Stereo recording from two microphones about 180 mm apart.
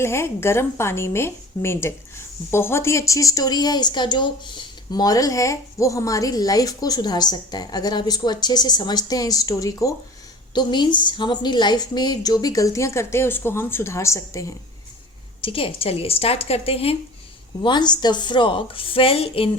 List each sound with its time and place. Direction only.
0.0 s a woman's voice: 15° left (ahead or behind)
15.4 s a woman's voice: 30° left (ahead or behind)